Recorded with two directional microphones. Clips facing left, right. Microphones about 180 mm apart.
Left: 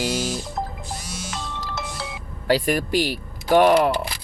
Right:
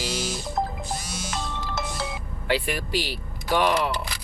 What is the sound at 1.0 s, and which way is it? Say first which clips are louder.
Music: right 1 dB; 45° right (ahead or behind).